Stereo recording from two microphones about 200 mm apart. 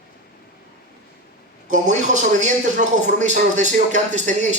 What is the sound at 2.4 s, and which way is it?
Speech, 35° right (ahead or behind).